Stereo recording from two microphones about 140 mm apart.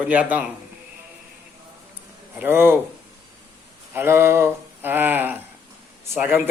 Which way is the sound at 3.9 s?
15° right (ahead or behind).